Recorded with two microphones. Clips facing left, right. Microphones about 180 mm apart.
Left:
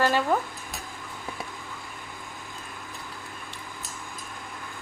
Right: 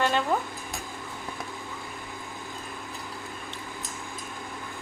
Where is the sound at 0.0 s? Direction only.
5° left (ahead or behind).